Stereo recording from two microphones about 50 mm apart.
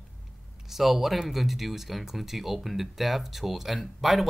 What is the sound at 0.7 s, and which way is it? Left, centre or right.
Speech, centre.